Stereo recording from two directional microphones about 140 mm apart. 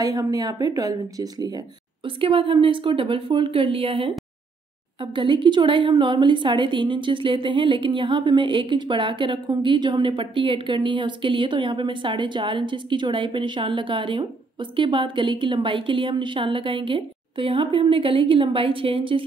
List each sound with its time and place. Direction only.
0.0 s speech: 25° right (ahead or behind)
2.0 s a woman's voice: 40° right (ahead or behind)